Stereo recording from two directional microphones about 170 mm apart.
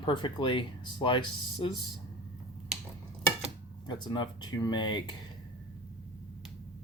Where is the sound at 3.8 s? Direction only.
25° left (ahead or behind).